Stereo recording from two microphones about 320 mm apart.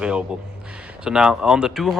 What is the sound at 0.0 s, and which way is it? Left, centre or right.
Speech, centre.